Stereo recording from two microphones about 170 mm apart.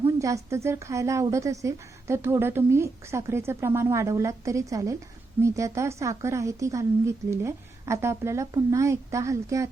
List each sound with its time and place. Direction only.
0.0 s speech: 20° right (ahead or behind)